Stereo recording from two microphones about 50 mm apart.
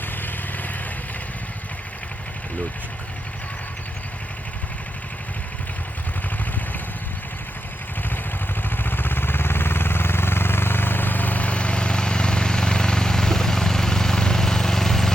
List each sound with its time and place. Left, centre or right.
0.2 s vehicle: left
8.7 s vehicle: left; by 15.1 s centre